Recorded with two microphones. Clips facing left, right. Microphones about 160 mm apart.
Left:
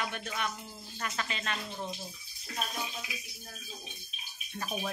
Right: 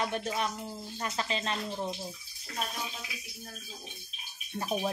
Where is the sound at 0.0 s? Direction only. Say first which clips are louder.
Right 4 dB; 30° right (ahead or behind).